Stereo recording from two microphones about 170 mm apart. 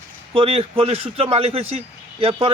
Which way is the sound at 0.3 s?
35° right (ahead or behind).